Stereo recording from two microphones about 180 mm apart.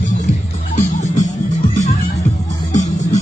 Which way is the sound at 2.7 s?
40° left (ahead or behind).